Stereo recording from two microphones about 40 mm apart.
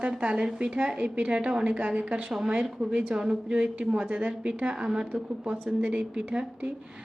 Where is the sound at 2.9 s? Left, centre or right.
Right.